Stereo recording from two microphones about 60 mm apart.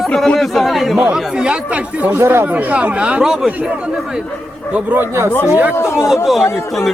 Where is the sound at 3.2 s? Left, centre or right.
Centre.